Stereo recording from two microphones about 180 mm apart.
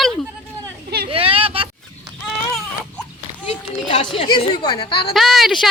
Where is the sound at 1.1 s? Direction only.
30° right (ahead or behind).